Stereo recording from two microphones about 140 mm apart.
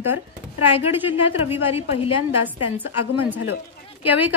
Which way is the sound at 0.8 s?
15° right (ahead or behind).